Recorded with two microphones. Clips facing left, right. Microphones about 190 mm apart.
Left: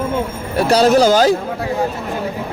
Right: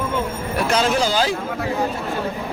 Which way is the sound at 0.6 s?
35° left (ahead or behind).